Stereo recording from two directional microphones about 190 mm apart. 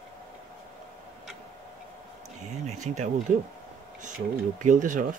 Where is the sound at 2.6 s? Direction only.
40° right (ahead or behind).